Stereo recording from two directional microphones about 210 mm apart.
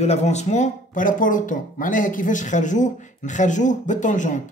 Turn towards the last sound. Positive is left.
turn(degrees=35)  # may be behind; listen again after turning